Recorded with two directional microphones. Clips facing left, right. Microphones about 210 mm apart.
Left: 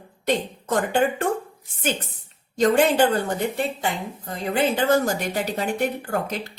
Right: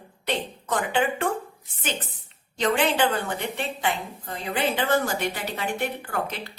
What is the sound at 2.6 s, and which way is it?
A woman's voice, 45° left (ahead or behind).